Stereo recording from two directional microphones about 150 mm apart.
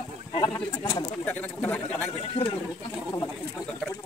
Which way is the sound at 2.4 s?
35° left (ahead or behind).